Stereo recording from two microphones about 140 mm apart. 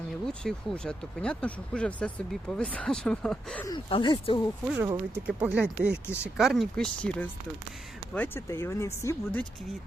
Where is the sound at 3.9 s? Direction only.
35° left (ahead or behind).